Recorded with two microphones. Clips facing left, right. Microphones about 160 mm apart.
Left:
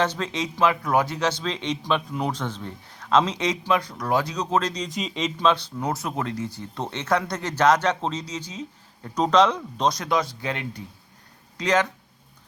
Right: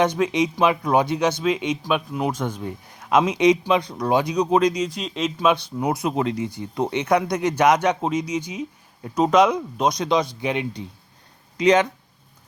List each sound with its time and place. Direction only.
0.0 s speech: 15° right (ahead or behind)